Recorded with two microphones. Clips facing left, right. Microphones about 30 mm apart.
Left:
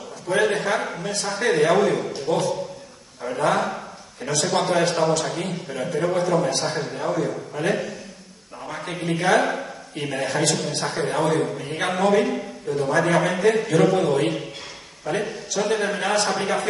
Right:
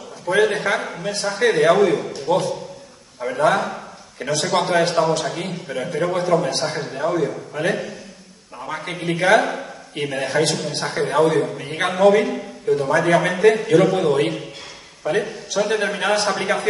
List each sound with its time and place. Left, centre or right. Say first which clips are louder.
0.3 s a man's voice: right 3 dB; centre
4.2 s a man's voice: right 2 dB; right
4.5 s a man's voice: right 2 dB; centre